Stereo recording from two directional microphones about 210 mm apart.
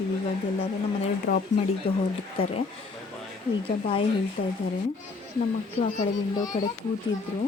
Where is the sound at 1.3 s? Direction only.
40° left (ahead or behind).